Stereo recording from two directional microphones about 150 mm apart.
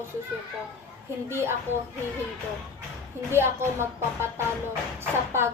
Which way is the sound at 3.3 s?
15° right (ahead or behind).